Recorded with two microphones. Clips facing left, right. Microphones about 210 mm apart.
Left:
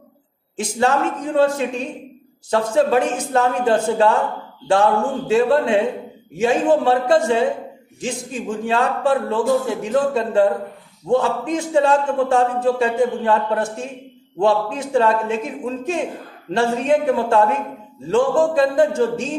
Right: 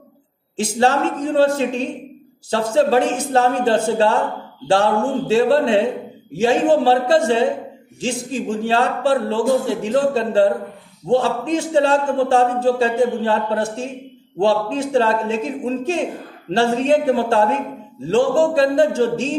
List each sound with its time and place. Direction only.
0.6 s a man's voice: 30° right (ahead or behind)
5.3 s a man's voice: 30° right (ahead or behind)